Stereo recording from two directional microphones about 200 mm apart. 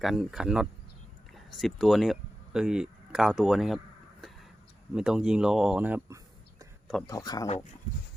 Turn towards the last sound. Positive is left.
turn(degrees=20)  # may be behind; listen again after turning